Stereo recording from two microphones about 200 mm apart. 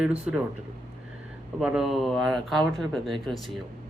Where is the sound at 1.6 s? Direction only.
5° right (ahead or behind).